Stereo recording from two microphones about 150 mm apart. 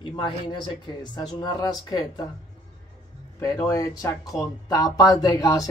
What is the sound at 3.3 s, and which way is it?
Speech, 25° left (ahead or behind).